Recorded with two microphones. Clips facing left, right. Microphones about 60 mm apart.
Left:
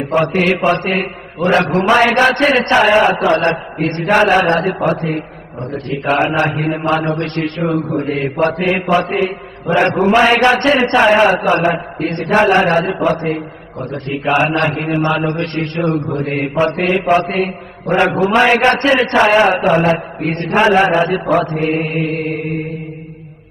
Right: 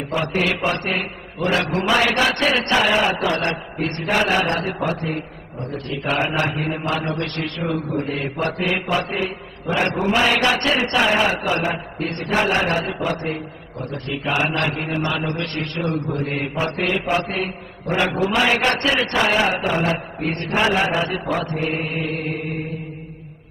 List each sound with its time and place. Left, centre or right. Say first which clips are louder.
0.0 s a man's voice: left 7 dB; left
6.5 s a man's voice: left 7 dB; left
6.9 s a man's voice: left 7 dB; left